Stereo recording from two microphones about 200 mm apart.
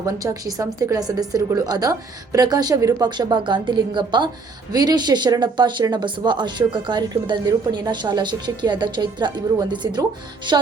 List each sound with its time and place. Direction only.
0.0 s speech: 15° right (ahead or behind)